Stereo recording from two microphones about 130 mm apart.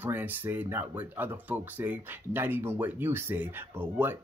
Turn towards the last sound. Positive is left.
turn(degrees=-15)  # may be behind; listen again after turning